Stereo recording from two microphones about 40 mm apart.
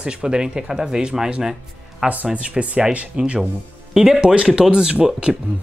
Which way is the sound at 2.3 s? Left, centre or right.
Right.